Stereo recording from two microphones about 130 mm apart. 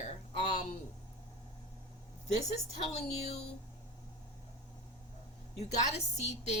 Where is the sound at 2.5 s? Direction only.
55° left (ahead or behind).